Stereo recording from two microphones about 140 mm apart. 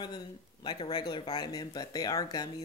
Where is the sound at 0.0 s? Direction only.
30° left (ahead or behind).